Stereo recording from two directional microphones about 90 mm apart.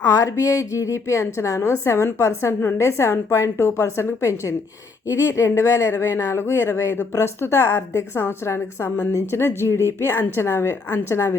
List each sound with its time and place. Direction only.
0.1 s a woman's voice: 40° left (ahead or behind)